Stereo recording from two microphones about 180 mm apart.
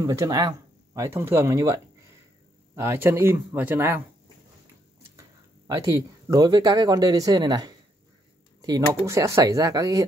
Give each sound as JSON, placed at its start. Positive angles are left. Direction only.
{"t": 0.0, "sound": "speech", "side_deg": -20}
{"t": 5.8, "sound": "speech", "side_deg": -20}